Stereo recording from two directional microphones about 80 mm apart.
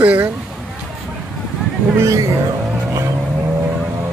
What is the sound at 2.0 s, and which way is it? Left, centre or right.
Speech, right.